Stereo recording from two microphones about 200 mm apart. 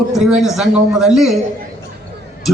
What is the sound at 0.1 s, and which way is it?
A man's voice, centre (ahead or behind).